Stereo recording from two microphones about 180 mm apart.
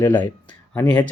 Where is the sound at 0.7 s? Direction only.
20° left (ahead or behind).